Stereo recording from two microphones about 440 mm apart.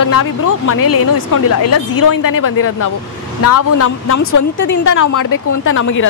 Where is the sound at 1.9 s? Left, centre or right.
Left.